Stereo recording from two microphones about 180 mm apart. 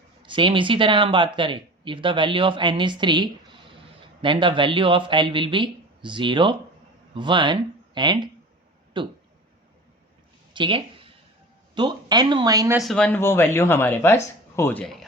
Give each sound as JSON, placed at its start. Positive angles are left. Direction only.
{"t": 0.2, "sound": "speech", "side_deg": -25}
{"t": 10.5, "sound": "a sound", "side_deg": -30}
{"t": 11.7, "sound": "speech", "side_deg": -25}
{"t": 12.7, "sound": "speech", "side_deg": 0}